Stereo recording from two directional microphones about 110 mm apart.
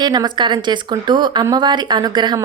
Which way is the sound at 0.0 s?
40° right (ahead or behind).